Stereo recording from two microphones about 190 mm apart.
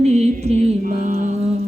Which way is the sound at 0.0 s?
35° right (ahead or behind).